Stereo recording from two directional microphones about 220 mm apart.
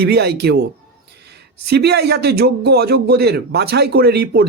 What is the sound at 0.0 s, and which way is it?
Speech, 45° right (ahead or behind).